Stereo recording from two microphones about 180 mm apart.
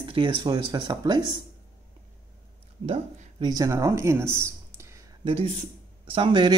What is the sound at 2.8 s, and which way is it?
Speech, 35° right (ahead or behind).